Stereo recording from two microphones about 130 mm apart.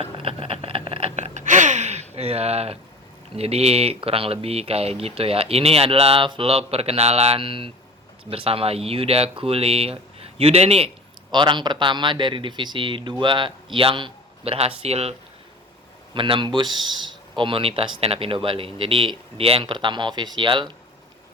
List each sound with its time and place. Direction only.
0.0 s a sound: 45° right (ahead or behind)
3.3 s speech: 50° right (ahead or behind)
11.3 s speech: 35° right (ahead or behind); by 15.1 s 50° right (ahead or behind)
16.1 s speech: 40° right (ahead or behind)